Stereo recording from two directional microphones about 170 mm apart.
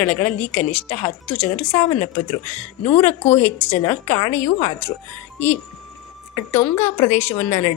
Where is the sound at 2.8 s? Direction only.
35° left (ahead or behind).